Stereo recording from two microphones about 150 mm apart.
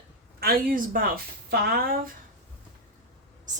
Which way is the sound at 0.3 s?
80° right.